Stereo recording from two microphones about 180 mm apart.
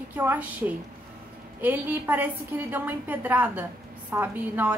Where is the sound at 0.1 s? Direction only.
10° right (ahead or behind).